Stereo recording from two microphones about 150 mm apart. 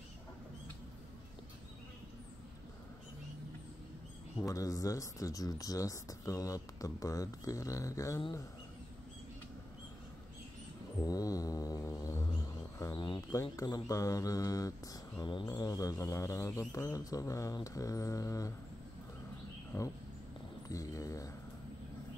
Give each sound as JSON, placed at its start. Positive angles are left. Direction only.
{"t": 4.4, "sound": "speech", "side_deg": 20}
{"t": 11.0, "sound": "mantra", "side_deg": 25}
{"t": 19.7, "sound": "speech", "side_deg": 20}
{"t": 20.6, "sound": "a sound", "side_deg": 20}